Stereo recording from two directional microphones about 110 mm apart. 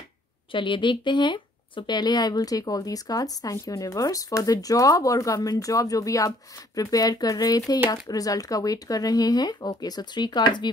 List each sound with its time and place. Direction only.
0.5 s speech: 45° left (ahead or behind)